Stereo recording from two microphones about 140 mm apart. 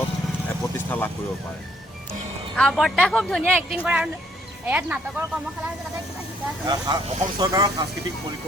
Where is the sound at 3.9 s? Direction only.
10° right (ahead or behind).